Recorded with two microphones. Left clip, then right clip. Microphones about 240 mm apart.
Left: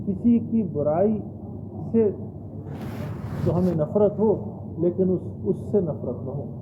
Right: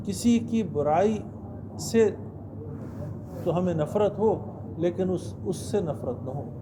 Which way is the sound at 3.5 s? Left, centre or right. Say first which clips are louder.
Left 2 dB; right.